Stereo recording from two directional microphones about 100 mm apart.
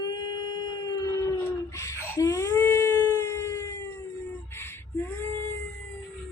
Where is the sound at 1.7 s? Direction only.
30° left (ahead or behind).